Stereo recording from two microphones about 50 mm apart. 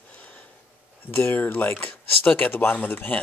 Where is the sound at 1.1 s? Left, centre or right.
Left.